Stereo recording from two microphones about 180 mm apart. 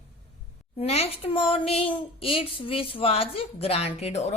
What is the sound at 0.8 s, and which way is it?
A woman's voice, 35° left (ahead or behind).